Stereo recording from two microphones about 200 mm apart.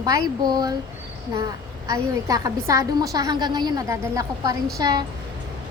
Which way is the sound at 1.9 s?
15° right (ahead or behind).